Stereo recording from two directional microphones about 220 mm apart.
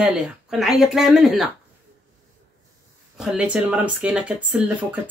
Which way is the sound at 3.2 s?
5° right (ahead or behind).